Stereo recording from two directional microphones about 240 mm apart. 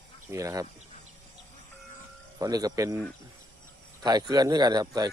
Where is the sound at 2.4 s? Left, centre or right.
Centre.